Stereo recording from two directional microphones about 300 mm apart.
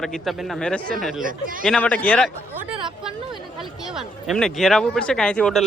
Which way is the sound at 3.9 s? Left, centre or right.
Centre.